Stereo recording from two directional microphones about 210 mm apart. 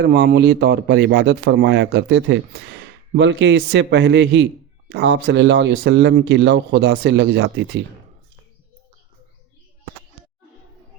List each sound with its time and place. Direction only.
0.0 s speech: 50° right (ahead or behind)